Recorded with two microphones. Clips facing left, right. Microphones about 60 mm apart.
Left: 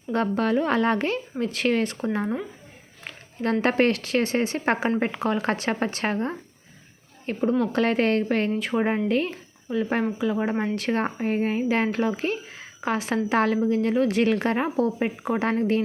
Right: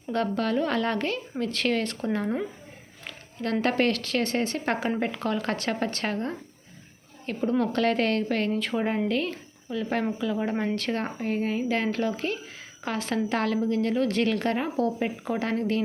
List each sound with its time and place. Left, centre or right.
0.1 s speech: centre
3.0 s a woman's voice: left